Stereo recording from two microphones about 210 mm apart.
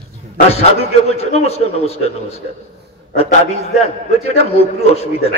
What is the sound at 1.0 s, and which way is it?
Speech, 30° left (ahead or behind).